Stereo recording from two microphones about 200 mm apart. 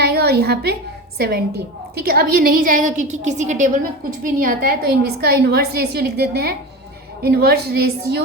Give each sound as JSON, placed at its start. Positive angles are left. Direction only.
{"t": 0.0, "sound": "a woman's voice", "side_deg": -55}
{"t": 2.0, "sound": "a woman's voice", "side_deg": -50}